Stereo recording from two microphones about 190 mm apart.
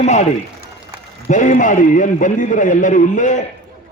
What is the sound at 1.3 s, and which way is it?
A man's voice, 40° left (ahead or behind).